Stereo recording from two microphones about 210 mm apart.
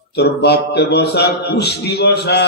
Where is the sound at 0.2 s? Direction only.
50° left (ahead or behind).